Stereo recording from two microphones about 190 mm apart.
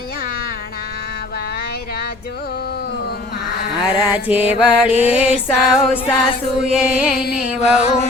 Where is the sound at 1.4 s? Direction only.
55° left (ahead or behind).